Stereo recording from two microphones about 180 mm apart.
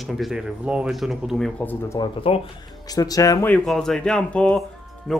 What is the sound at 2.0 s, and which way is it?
Speech, 30° left (ahead or behind).